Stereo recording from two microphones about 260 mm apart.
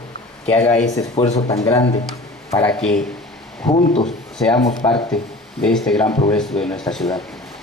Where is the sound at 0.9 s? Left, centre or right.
Left; by 3.0 s centre.